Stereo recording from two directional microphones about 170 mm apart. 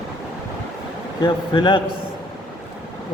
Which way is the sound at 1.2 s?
30° left (ahead or behind).